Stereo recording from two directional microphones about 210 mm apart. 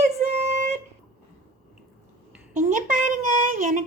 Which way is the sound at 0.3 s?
30° right (ahead or behind).